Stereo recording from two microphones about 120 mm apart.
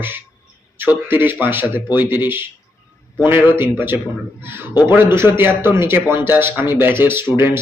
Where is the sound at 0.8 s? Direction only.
15° right (ahead or behind).